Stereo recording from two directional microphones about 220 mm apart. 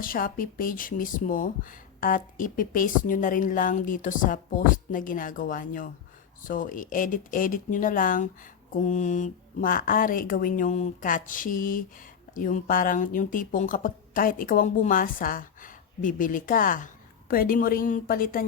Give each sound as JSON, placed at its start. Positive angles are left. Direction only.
{"t": 0.0, "sound": "speech", "side_deg": 40}